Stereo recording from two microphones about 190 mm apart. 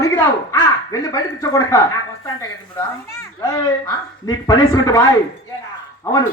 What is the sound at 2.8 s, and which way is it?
A child's voice, 15° left (ahead or behind).